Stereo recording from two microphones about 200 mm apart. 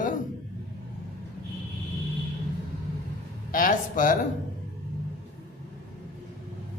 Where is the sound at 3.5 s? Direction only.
40° left (ahead or behind).